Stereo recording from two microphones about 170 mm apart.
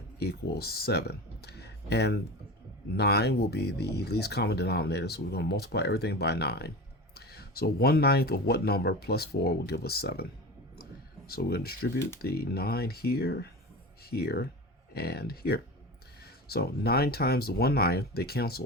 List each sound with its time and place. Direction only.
0.2 s speech: 70° left (ahead or behind)
11.3 s speech: 65° left (ahead or behind)